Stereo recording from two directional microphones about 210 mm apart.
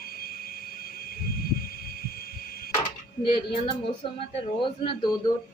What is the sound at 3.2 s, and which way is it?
Speech, 25° left (ahead or behind).